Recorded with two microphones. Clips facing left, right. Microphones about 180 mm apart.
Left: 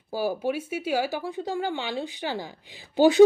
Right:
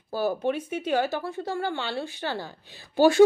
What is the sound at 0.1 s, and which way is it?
A woman's voice, 10° left (ahead or behind).